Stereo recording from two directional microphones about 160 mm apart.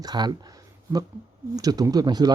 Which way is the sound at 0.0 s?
25° right (ahead or behind).